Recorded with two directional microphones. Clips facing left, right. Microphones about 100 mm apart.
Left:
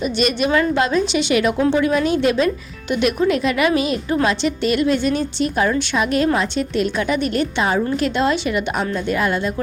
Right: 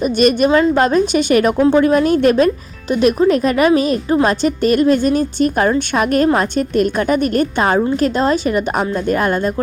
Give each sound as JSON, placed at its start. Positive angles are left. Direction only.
{"t": 0.0, "sound": "a woman's voice", "side_deg": -45}